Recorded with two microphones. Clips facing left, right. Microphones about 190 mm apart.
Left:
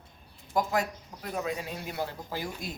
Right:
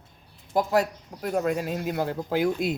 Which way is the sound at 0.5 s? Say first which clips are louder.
Right 5 dB; 35° right (ahead or behind).